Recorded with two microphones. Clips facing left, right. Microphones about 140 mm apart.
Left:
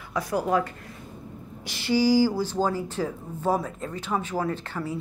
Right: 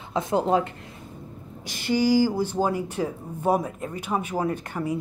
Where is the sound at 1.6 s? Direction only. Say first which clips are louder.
Even; 45° right (ahead or behind).